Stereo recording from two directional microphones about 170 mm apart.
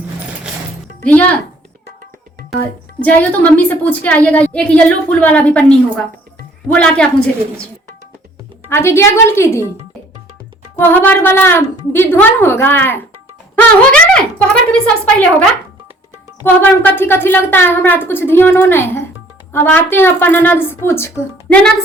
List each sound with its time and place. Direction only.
1.0 s a woman's voice: 10° left (ahead or behind)
3.0 s a woman's voice: 10° left (ahead or behind)
8.7 s a woman's voice: 15° left (ahead or behind)
10.8 s a woman's voice: 10° left (ahead or behind)
13.6 s a sound: 5° left (ahead or behind)
14.7 s a woman's voice: 5° left (ahead or behind)